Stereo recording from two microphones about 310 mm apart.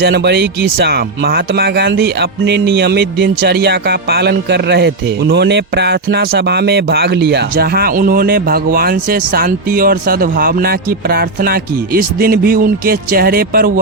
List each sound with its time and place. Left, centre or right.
0.0 s speech: right